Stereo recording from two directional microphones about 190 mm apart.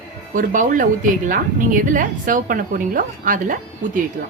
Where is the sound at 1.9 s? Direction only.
45° right (ahead or behind).